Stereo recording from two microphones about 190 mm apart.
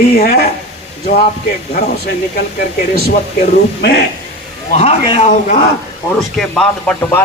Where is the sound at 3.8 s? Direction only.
60° left (ahead or behind).